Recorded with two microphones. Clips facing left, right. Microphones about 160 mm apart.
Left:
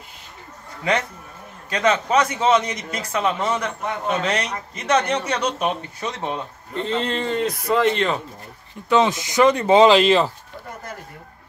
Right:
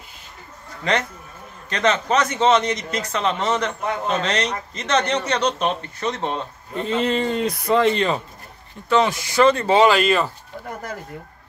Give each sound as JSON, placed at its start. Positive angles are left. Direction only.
{"t": 0.8, "sound": "a man's voice", "side_deg": 10}
{"t": 6.7, "sound": "speech", "side_deg": -10}
{"t": 8.8, "sound": "speech", "side_deg": 20}